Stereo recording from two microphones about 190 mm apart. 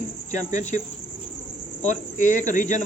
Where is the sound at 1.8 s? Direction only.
40° left (ahead or behind).